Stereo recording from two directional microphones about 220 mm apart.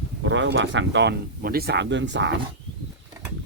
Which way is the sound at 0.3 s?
55° right (ahead or behind).